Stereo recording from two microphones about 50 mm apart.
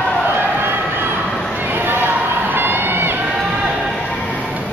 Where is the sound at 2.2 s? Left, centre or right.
Right.